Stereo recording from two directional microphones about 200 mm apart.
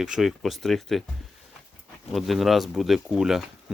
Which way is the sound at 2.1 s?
Centre (ahead or behind).